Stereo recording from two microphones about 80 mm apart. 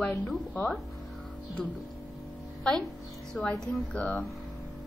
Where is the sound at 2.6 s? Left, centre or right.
Centre.